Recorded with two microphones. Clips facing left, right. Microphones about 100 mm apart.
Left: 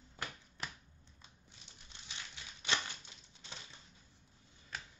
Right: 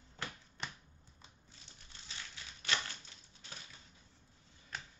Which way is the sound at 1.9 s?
20° left (ahead or behind).